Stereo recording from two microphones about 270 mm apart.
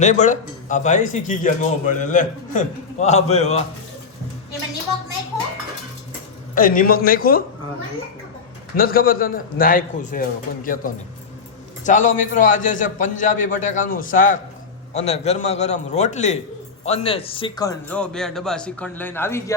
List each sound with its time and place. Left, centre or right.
0.0 s a man's voice: left
6.5 s a man's voice: left
8.7 s a man's voice: left; by 19.5 s centre